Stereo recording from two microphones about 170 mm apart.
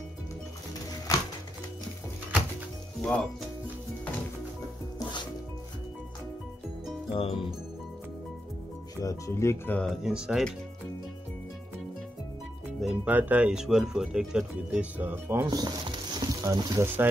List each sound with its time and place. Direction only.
3.0 s speech: 5° left (ahead or behind)
7.1 s speech: 35° left (ahead or behind)
9.0 s speech: 20° left (ahead or behind); by 10.5 s 5° right (ahead or behind)
12.8 s speech: 10° right (ahead or behind)
15.5 s speech: 25° right (ahead or behind)